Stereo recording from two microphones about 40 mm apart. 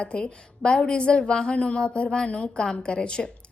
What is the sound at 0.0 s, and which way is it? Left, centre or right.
A woman's voice, left.